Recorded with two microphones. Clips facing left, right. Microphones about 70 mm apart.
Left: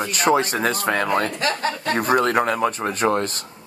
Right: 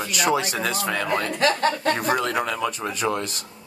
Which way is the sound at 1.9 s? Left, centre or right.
Left.